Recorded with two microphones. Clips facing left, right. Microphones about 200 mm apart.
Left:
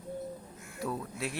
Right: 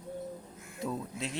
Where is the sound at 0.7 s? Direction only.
20° right (ahead or behind).